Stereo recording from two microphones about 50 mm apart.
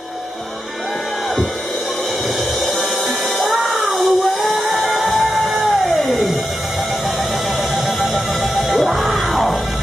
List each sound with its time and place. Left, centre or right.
3.9 s a sound: centre
4.7 s music: centre
7.7 s music: centre